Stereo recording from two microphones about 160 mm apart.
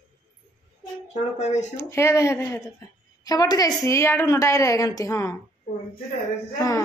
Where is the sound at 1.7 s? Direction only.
15° left (ahead or behind).